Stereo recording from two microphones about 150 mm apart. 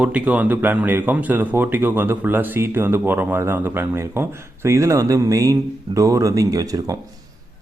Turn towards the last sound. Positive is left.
turn(degrees=-25)  # may be behind; listen again after turning